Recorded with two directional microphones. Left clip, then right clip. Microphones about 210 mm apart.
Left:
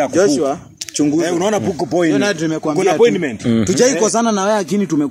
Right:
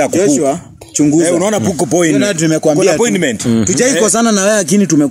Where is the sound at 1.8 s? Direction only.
50° right (ahead or behind).